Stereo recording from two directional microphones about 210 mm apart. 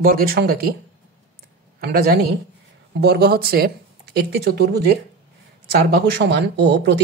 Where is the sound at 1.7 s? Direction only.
45° right (ahead or behind).